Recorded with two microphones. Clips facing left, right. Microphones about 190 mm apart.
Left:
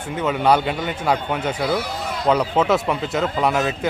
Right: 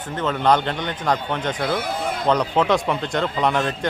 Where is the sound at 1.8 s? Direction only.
50° right (ahead or behind).